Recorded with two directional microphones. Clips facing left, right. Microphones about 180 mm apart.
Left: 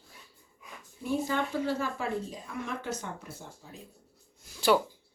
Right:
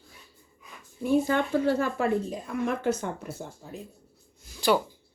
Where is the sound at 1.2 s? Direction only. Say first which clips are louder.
Right 6 dB; 60° right (ahead or behind).